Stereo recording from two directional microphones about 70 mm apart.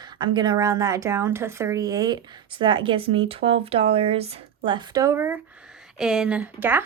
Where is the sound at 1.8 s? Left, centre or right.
Right.